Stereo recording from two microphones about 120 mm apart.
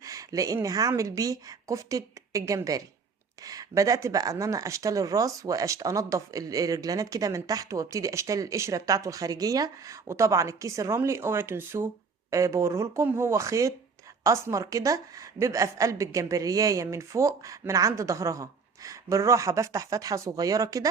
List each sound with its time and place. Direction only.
0.0 s a woman's voice: 30° right (ahead or behind)